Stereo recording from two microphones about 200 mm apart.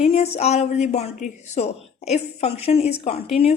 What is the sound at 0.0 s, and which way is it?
A woman's voice, 30° left (ahead or behind).